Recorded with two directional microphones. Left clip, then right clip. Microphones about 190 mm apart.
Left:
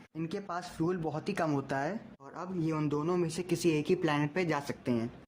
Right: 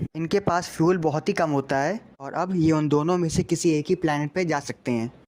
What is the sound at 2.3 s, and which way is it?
Speech, 40° right (ahead or behind).